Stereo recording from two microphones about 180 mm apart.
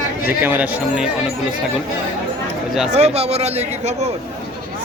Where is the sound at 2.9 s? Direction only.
35° right (ahead or behind).